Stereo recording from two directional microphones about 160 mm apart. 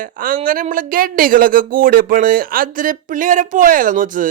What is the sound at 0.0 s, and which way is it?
Speech, 60° right (ahead or behind).